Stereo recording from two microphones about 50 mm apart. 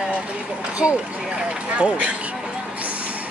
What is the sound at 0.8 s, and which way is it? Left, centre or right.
Speech, centre.